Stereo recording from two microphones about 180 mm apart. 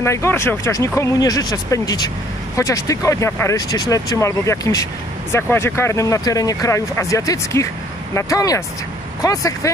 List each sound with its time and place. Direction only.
0.0 s speech: 15° left (ahead or behind)